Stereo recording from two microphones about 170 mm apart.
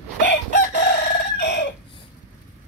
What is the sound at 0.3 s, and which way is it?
Chicken, 90° left.